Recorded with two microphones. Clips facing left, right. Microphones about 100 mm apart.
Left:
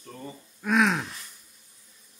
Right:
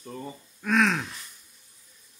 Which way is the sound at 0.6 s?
10° left (ahead or behind).